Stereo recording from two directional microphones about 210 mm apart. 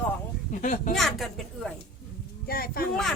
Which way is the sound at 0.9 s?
Centre (ahead or behind).